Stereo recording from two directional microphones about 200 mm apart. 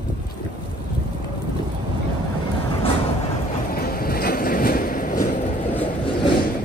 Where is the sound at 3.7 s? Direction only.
50° left (ahead or behind).